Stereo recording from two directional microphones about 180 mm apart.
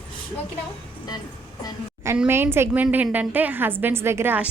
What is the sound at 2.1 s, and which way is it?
A woman's voice, 10° right (ahead or behind).